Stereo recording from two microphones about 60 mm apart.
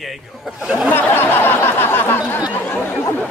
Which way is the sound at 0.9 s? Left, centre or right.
Left.